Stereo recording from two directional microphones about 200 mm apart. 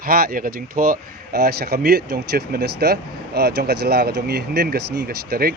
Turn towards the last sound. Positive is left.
turn(degrees=-50)  # may be behind; listen again after turning